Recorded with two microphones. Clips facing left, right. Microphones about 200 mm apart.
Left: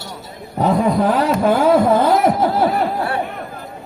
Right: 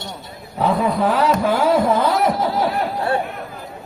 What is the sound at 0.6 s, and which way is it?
Speech, 40° left (ahead or behind).